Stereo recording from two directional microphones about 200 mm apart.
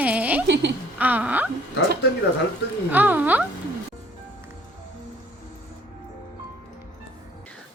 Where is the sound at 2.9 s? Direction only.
10° right (ahead or behind).